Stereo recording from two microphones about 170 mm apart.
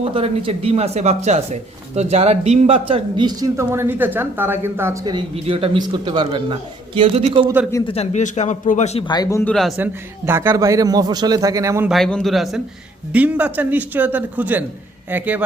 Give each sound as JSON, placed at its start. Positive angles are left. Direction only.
{"t": 0.1, "sound": "a man's voice", "side_deg": -35}
{"t": 5.3, "sound": "a man's voice", "side_deg": -35}
{"t": 7.9, "sound": "a man's voice", "side_deg": 40}
{"t": 9.0, "sound": "speech", "side_deg": 25}
{"t": 9.4, "sound": "a man's voice", "side_deg": 5}
{"t": 9.7, "sound": "speech", "side_deg": -10}
{"t": 11.9, "sound": "a man's voice", "side_deg": 0}